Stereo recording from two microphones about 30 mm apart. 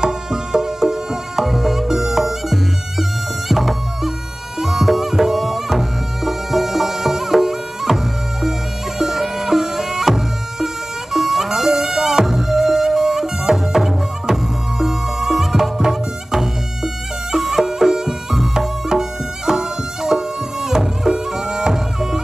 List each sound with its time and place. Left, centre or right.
0.0 s music: right